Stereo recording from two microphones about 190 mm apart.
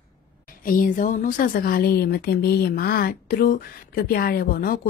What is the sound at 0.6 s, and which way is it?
Speech, 45° left (ahead or behind).